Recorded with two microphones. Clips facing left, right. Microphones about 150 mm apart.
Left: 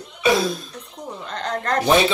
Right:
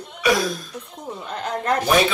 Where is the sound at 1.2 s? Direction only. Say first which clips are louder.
Right 1 dB; 10° right (ahead or behind).